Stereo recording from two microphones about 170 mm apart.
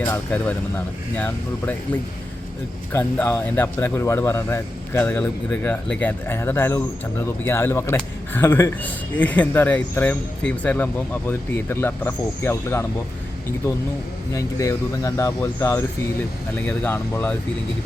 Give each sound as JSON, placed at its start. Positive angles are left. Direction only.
{"t": 0.1, "sound": "speech", "side_deg": 10}
{"t": 14.3, "sound": "speech", "side_deg": 20}